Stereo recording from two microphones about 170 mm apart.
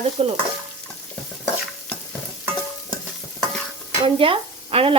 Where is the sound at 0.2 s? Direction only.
35° right (ahead or behind).